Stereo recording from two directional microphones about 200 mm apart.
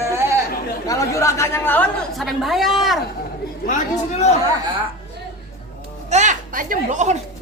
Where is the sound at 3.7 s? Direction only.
35° left (ahead or behind).